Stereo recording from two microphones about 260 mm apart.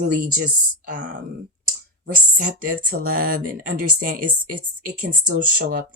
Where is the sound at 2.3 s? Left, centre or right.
Right.